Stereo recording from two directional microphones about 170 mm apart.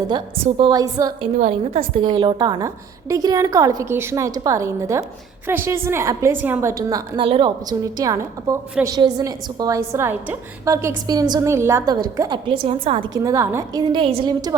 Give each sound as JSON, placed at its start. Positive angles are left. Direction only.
{"t": 0.4, "sound": "a woman's voice", "side_deg": -30}
{"t": 1.4, "sound": "a woman's voice", "side_deg": -40}
{"t": 2.0, "sound": "a woman's voice", "side_deg": -25}
{"t": 13.1, "sound": "a woman's voice", "side_deg": -20}